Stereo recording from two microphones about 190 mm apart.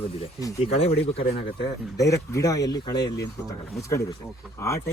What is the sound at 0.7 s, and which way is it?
Speech, 30° left (ahead or behind).